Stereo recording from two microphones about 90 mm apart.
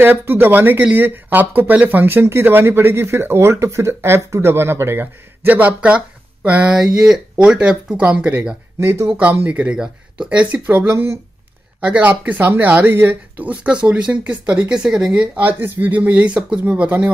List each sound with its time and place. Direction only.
0.0 s speech: 25° right (ahead or behind)
8.7 s speech: 30° right (ahead or behind)
9.3 s speech: 15° right (ahead or behind)